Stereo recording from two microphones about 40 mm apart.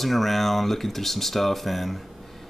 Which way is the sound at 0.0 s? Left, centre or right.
Centre.